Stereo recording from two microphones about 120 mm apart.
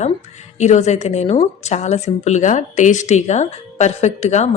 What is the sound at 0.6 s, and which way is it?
A woman's voice, 75° left (ahead or behind).